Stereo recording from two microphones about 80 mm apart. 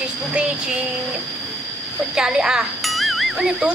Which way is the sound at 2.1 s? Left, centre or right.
Centre.